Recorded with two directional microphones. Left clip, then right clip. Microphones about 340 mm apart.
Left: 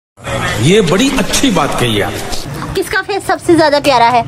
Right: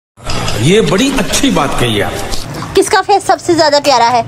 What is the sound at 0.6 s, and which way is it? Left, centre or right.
Speech, centre.